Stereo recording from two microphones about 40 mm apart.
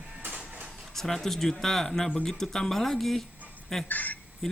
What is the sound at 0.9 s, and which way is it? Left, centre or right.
Speech, centre.